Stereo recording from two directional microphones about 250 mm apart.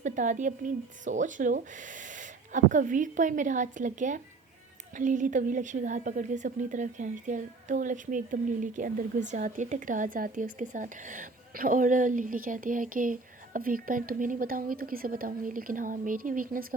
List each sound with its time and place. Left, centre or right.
0.0 s a woman's voice: right